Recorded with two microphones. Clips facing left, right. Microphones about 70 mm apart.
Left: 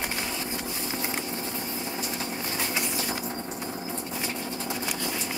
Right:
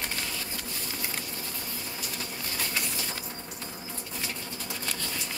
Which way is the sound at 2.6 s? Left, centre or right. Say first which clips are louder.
Left 2 dB; left.